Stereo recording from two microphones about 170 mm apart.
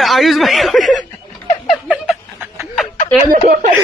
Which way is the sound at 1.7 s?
5° right (ahead or behind).